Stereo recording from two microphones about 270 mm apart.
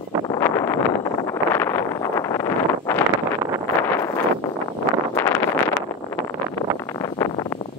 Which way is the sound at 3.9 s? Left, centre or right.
Centre.